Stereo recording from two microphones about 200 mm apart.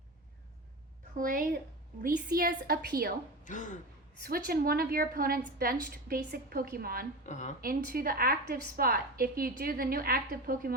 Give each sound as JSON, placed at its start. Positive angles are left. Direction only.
{"t": 1.1, "sound": "a woman's voice", "side_deg": -45}
{"t": 3.4, "sound": "speech", "side_deg": 40}
{"t": 4.2, "sound": "a woman's voice", "side_deg": -50}
{"t": 7.3, "sound": "a woman's voice", "side_deg": 35}
{"t": 7.6, "sound": "a woman's voice", "side_deg": -45}